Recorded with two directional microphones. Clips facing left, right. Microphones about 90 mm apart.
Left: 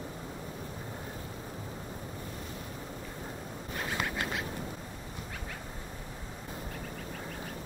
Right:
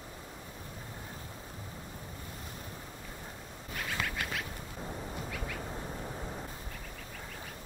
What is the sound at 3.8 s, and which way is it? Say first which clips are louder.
Duck: left 2 dB; 25° left (ahead or behind).